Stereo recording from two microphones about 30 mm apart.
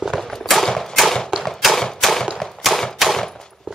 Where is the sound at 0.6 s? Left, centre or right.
Centre.